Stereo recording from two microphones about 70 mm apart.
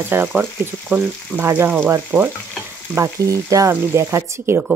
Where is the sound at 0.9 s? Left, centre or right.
Right.